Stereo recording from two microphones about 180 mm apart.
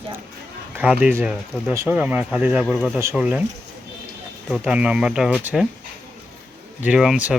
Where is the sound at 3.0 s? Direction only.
10° right (ahead or behind).